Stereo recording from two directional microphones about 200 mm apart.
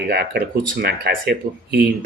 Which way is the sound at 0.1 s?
55° right (ahead or behind).